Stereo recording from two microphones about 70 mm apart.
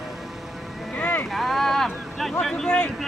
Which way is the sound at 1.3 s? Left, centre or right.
Centre.